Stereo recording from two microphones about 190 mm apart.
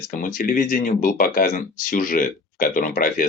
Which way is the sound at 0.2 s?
45° left (ahead or behind).